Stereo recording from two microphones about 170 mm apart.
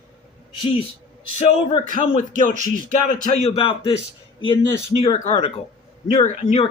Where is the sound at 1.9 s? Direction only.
50° left (ahead or behind).